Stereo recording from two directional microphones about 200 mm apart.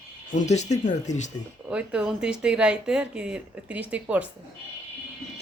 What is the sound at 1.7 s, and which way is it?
Speech, 5° right (ahead or behind).